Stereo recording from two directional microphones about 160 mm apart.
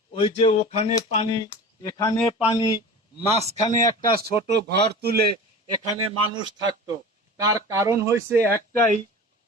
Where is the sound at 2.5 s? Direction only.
30° left (ahead or behind).